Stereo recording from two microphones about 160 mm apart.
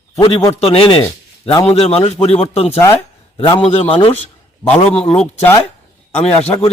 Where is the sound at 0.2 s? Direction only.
35° left (ahead or behind).